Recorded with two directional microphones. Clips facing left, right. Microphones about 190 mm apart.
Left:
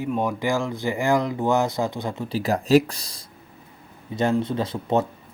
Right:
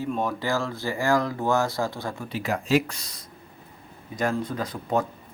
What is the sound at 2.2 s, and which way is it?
Speech, 35° left (ahead or behind).